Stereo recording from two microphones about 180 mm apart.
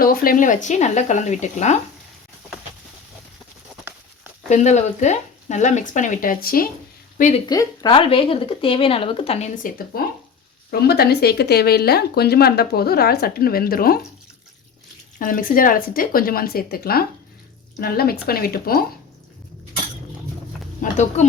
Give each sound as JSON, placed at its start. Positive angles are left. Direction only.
{"t": 0.0, "sound": "speech", "side_deg": 55}
{"t": 4.4, "sound": "speech", "side_deg": 40}
{"t": 7.2, "sound": "speech", "side_deg": 40}
{"t": 7.4, "sound": "speech", "side_deg": 20}
{"t": 9.6, "sound": "speech", "side_deg": 55}
{"t": 15.2, "sound": "speech", "side_deg": 50}
{"t": 20.9, "sound": "speech", "side_deg": 40}